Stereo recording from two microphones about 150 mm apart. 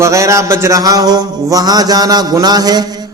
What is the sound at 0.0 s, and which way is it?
A man's voice, 20° right (ahead or behind).